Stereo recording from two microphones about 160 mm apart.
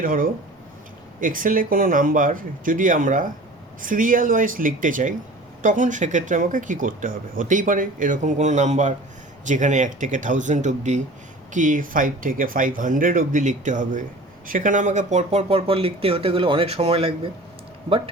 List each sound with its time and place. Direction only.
0.0 s speech: 60° right (ahead or behind); by 18.1 s 35° right (ahead or behind)